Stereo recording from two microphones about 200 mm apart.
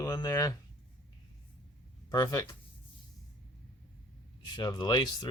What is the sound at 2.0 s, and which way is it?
Speech, 20° left (ahead or behind).